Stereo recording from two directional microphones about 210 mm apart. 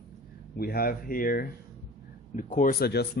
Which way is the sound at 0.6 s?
45° left (ahead or behind).